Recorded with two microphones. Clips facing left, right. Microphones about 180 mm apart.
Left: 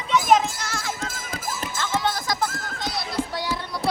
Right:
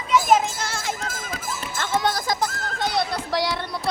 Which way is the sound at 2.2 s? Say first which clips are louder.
Right 1 dB; 25° right (ahead or behind).